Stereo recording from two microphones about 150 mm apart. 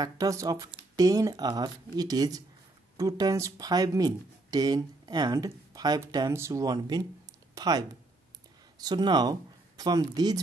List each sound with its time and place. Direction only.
0.0 s speech: 25° right (ahead or behind)